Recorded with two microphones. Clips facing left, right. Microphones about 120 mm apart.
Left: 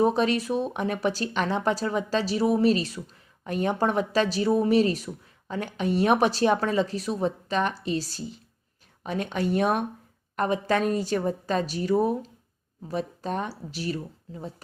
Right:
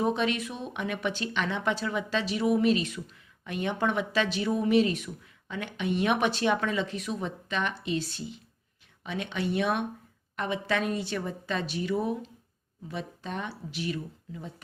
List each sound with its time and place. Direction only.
0.0 s speech: 35° left (ahead or behind)